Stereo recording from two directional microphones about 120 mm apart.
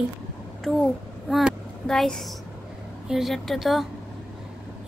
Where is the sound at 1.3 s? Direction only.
Centre (ahead or behind).